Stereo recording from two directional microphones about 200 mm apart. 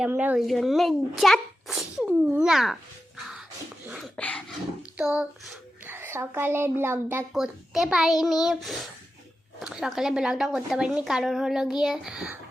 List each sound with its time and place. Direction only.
0.0 s a child's voice: 10° right (ahead or behind)
3.8 s speech: centre (ahead or behind)
4.9 s a child's voice: 5° right (ahead or behind)